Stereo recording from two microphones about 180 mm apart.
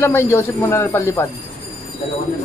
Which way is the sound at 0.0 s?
15° left (ahead or behind).